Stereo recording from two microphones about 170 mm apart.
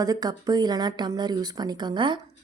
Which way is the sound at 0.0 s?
20° right (ahead or behind).